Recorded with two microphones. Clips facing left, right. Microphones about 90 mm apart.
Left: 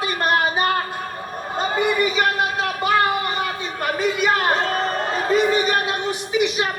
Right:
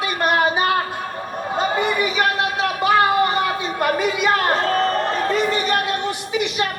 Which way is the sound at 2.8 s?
20° right (ahead or behind).